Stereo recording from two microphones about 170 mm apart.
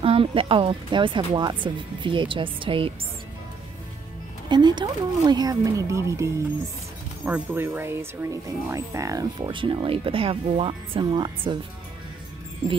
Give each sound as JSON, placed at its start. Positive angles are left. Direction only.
{"t": 0.0, "sound": "speech", "side_deg": -30}
{"t": 4.5, "sound": "speech", "side_deg": -25}